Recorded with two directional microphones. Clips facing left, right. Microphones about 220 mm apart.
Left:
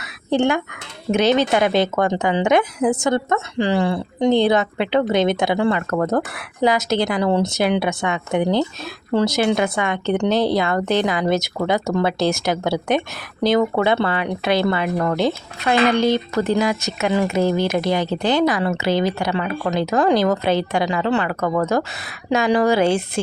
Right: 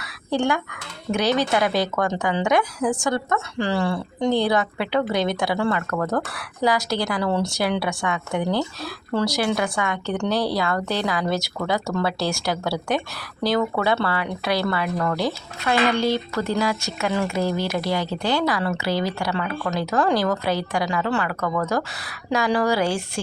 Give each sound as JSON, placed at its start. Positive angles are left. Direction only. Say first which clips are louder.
{"t": 0.3, "sound": "speech", "louder": "left 4 dB", "side_deg": 20}